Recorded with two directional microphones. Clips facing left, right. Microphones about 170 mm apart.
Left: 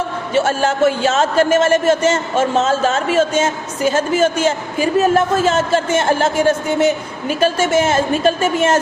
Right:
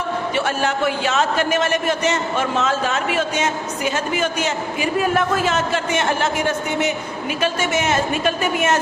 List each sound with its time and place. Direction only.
0.3 s a man's voice: 30° left (ahead or behind)